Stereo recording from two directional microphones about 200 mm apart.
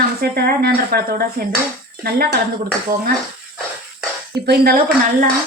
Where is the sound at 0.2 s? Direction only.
50° right (ahead or behind).